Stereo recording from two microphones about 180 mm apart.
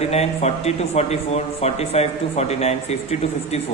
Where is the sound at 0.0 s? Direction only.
35° left (ahead or behind).